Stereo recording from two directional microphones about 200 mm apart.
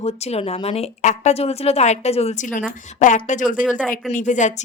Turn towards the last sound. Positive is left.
turn(degrees=35)  # may be behind; listen again after turning